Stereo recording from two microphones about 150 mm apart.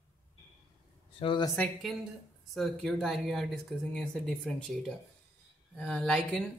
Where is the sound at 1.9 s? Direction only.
Centre (ahead or behind).